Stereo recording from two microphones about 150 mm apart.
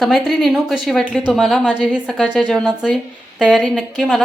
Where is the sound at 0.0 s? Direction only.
Centre (ahead or behind).